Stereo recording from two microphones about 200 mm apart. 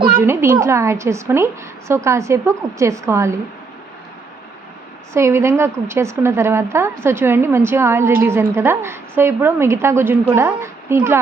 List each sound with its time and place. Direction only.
0.1 s a woman's voice: 10° right (ahead or behind)
5.1 s a woman's voice: 15° right (ahead or behind)